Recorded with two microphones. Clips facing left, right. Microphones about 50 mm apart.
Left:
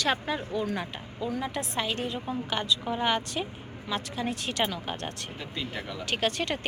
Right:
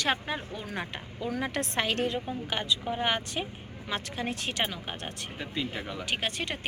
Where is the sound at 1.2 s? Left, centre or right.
Right.